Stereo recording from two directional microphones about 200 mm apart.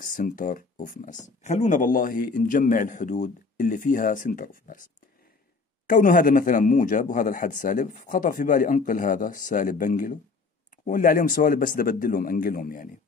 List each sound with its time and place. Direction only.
0.0 s speech: 40° left (ahead or behind)
5.9 s speech: 45° left (ahead or behind)